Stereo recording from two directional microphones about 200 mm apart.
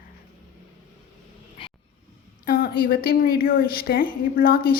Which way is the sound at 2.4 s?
45° left (ahead or behind).